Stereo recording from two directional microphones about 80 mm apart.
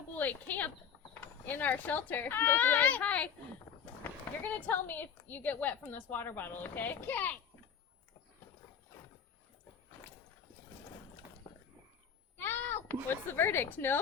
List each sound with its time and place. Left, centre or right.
0.1 s a woman's voice: left
12.4 s speech: left